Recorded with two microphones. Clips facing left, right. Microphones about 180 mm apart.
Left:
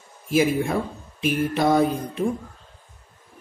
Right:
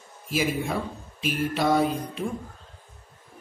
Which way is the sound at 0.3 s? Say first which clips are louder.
Left 6 dB; 55° left (ahead or behind).